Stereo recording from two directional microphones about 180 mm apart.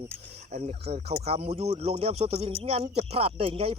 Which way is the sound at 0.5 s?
35° right (ahead or behind).